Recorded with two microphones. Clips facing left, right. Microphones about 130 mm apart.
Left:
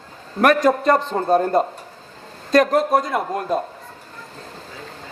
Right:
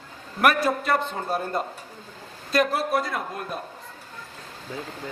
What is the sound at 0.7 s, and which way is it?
Speech, 40° left (ahead or behind).